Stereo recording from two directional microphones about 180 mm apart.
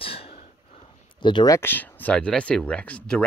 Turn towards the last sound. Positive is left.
turn(degrees=5)  # may be behind; listen again after turning